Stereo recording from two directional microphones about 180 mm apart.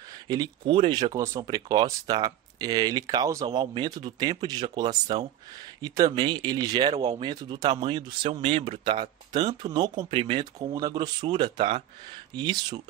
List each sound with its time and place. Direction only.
0.3 s speech: 25° right (ahead or behind)